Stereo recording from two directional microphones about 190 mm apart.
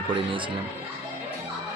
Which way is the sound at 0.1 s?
25° right (ahead or behind).